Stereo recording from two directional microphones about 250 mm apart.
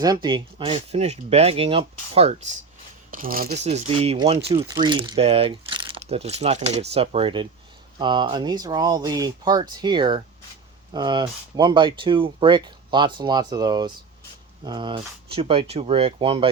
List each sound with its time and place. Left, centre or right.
0.0 s speech: centre
3.1 s speech: right